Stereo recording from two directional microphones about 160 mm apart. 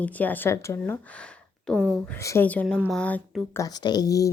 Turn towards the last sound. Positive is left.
turn(degrees=20)  # may be behind; listen again after turning